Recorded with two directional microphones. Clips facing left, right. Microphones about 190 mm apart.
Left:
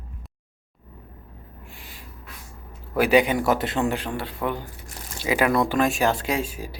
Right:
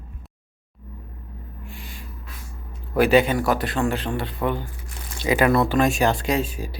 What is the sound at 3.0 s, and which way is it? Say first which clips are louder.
A man's voice: right 2 dB; 15° left (ahead or behind).